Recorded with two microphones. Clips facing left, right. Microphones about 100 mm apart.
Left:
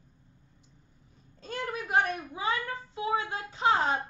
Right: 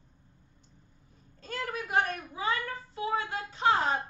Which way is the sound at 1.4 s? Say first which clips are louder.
Left 1 dB; 25° left (ahead or behind).